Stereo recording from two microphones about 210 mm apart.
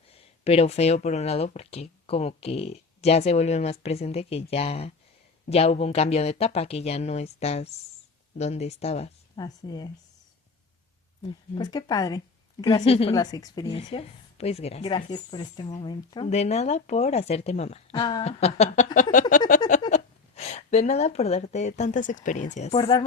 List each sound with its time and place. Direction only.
0.1 s speech: 30° left (ahead or behind)
11.2 s speech: 25° left (ahead or behind)
16.3 s speech: 30° left (ahead or behind)
19.5 s a sound: 40° left (ahead or behind)
19.9 s speech: 30° left (ahead or behind)